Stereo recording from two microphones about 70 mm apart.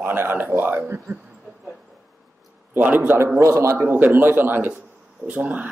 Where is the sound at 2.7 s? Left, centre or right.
Right.